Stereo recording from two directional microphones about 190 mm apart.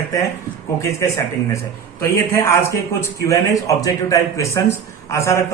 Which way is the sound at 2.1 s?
15° left (ahead or behind).